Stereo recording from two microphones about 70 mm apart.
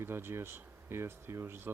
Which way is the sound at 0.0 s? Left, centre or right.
Right.